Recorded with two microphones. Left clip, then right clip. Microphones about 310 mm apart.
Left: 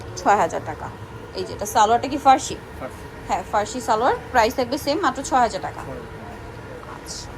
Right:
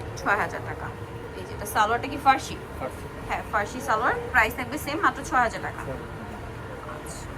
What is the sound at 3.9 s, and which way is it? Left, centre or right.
Speech, centre.